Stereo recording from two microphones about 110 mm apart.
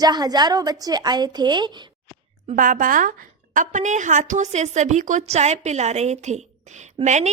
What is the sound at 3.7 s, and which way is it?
A woman's voice, 90° right.